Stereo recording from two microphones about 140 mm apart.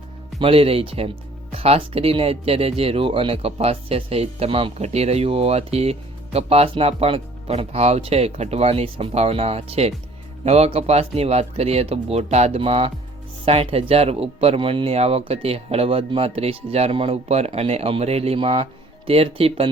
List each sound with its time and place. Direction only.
0.3 s speech: 40° right (ahead or behind)